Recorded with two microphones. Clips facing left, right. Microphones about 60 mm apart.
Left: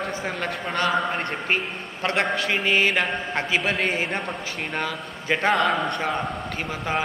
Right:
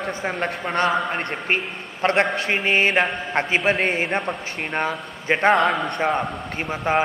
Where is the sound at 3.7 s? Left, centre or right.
Right.